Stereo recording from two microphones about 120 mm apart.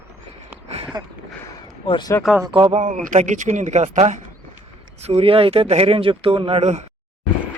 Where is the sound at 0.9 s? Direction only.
35° right (ahead or behind).